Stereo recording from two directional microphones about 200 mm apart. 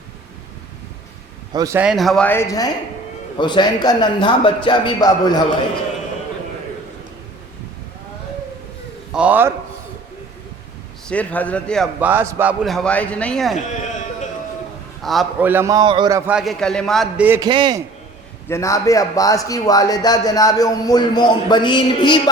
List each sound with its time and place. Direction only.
1.5 s a man's voice: 15° right (ahead or behind)
1.8 s a man's voice: centre (ahead or behind); by 5.4 s 20° left (ahead or behind)
9.1 s a man's voice: 5° right (ahead or behind)
11.1 s a man's voice: 5° left (ahead or behind)
11.9 s a man's voice: 10° right (ahead or behind)
15.0 s a man's voice: centre (ahead or behind); by 16.3 s 15° right (ahead or behind)
16.3 s a man's voice: centre (ahead or behind)
17.2 s a man's voice: 10° right (ahead or behind)
18.4 s a man's voice: 15° left (ahead or behind)